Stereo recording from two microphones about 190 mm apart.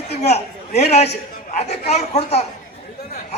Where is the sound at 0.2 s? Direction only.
35° left (ahead or behind).